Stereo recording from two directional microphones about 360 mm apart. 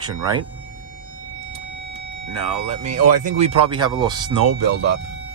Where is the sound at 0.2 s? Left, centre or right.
Centre.